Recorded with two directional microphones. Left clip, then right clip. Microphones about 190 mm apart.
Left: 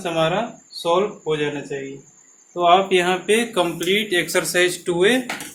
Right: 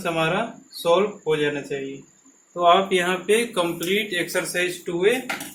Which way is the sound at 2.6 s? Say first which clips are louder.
Left 2 dB; 15° left (ahead or behind).